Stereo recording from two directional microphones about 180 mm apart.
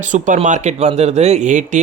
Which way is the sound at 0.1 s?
45° right (ahead or behind).